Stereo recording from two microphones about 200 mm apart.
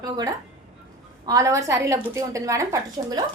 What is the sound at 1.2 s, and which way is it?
A woman's voice, 15° right (ahead or behind).